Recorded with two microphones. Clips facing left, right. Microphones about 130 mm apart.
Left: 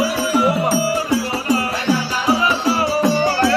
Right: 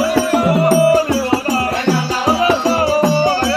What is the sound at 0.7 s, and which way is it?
Music, 55° right (ahead or behind).